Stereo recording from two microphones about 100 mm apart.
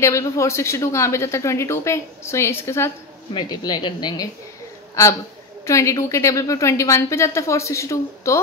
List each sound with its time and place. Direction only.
0.0 s speech: 30° left (ahead or behind)
3.3 s speech: 45° left (ahead or behind)
5.7 s a woman's voice: 30° left (ahead or behind)